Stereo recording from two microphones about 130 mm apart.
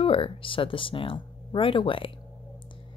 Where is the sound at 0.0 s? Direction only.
45° left (ahead or behind).